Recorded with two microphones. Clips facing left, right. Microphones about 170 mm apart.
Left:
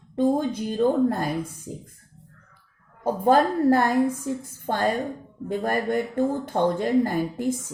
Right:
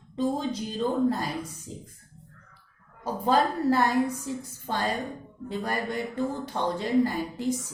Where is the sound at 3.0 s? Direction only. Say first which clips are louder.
Left 5 dB; 50° left (ahead or behind).